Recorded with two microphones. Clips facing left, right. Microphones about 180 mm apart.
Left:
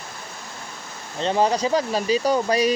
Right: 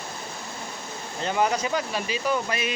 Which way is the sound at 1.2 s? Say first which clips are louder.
Left 4 dB; 30° left (ahead or behind).